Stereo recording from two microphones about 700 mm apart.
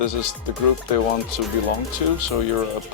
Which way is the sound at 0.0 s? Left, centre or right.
Left.